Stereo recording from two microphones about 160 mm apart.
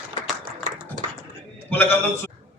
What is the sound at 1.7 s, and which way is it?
Speech, 15° left (ahead or behind).